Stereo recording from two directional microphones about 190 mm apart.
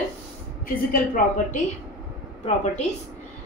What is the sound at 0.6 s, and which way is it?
Speech, 45° left (ahead or behind).